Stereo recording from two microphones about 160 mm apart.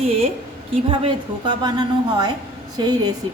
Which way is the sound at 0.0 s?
40° right (ahead or behind).